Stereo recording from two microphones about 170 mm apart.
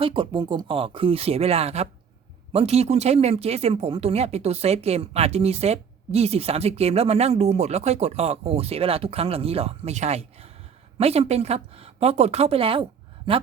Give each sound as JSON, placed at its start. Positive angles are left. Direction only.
{"t": 0.0, "sound": "speech", "side_deg": -30}